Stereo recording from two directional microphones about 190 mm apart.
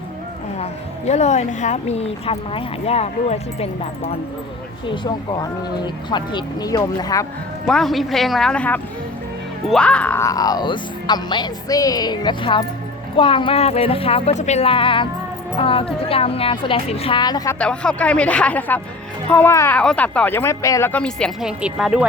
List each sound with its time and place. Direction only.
0.6 s speech: 35° left (ahead or behind); by 7.3 s 20° left (ahead or behind)
7.7 s speech: centre (ahead or behind); by 17.6 s 20° left (ahead or behind)
17.6 s speech: 5° left (ahead or behind)